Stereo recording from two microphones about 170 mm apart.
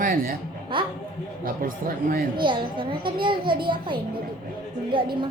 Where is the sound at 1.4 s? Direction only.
55° right (ahead or behind).